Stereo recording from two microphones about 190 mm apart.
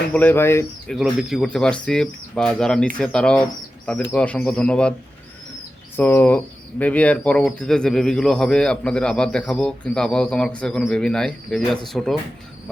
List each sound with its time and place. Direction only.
0.1 s speech: 10° left (ahead or behind)
0.9 s speech: centre (ahead or behind)
6.0 s speech: 10° left (ahead or behind)